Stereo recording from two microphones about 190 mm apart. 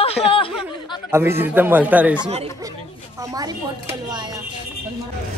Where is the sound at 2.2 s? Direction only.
30° right (ahead or behind).